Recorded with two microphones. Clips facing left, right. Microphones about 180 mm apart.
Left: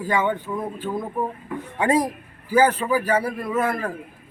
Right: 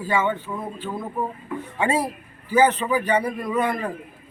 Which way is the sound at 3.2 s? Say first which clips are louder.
Even; 20° right (ahead or behind).